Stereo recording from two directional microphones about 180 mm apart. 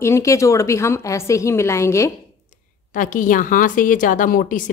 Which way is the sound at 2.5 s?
45° left (ahead or behind).